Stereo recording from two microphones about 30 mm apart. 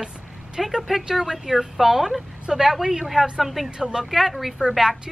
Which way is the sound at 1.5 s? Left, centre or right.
Centre.